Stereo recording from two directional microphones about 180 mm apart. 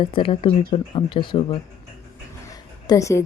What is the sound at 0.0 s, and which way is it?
Speech, 30° left (ahead or behind).